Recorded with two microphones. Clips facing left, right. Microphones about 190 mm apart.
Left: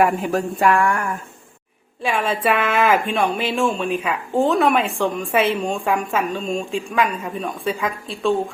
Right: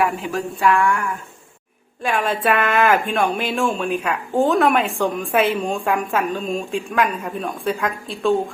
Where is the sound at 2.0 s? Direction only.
Centre (ahead or behind).